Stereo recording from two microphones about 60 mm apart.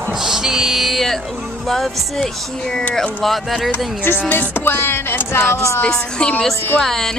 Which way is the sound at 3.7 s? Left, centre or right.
Left.